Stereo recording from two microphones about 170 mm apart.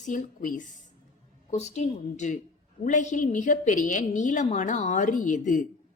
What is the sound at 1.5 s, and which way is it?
A woman's voice, 40° left (ahead or behind).